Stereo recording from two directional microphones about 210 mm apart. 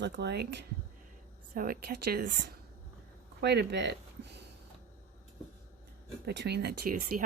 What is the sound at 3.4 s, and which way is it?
Speech, 50° right (ahead or behind).